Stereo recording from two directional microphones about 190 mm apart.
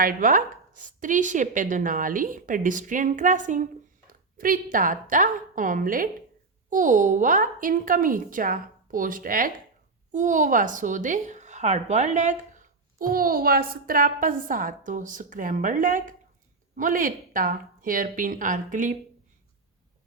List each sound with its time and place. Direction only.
0.0 s a woman's voice: 45° right (ahead or behind)